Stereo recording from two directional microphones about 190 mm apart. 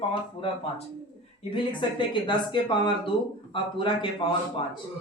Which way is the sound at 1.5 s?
25° left (ahead or behind).